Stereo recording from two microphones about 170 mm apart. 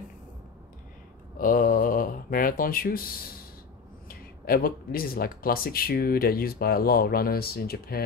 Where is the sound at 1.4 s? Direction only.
55° left (ahead or behind).